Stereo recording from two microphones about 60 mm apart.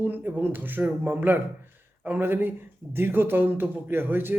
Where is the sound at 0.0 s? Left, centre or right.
Right.